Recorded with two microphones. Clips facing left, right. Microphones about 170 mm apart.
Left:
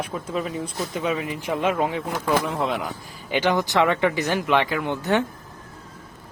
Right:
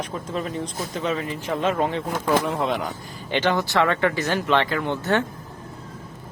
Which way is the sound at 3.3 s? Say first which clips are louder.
Left 1 dB; 10° left (ahead or behind).